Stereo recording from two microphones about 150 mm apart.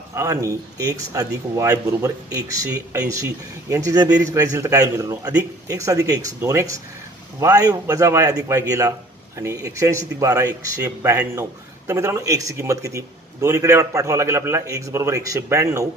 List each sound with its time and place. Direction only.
0.1 s a man's voice: 20° right (ahead or behind)